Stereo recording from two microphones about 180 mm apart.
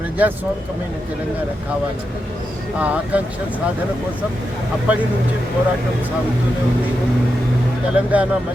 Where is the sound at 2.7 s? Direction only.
10° right (ahead or behind).